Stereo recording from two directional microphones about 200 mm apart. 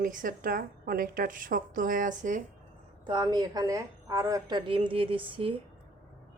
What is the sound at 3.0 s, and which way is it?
A woman's voice, 20° right (ahead or behind).